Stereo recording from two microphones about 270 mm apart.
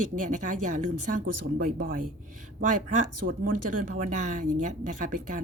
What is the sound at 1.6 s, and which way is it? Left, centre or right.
Speech, right.